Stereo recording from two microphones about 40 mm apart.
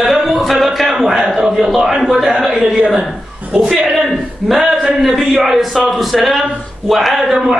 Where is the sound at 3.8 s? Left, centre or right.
Centre.